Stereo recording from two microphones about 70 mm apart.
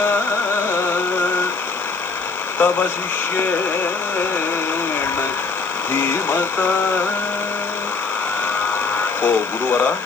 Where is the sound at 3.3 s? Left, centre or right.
Left.